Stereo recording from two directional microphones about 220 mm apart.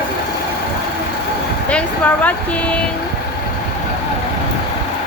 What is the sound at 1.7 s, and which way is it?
Speech, 5° left (ahead or behind).